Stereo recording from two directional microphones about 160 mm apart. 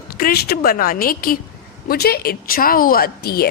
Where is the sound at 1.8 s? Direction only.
75° left (ahead or behind).